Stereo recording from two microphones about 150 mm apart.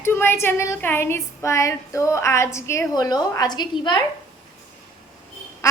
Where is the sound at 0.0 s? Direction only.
15° left (ahead or behind).